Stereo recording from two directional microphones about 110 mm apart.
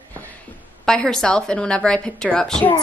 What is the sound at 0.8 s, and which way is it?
Speech, 5° left (ahead or behind).